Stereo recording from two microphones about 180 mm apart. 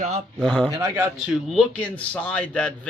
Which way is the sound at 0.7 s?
15° right (ahead or behind).